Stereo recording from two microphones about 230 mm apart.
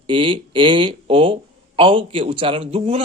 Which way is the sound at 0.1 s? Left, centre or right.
Right.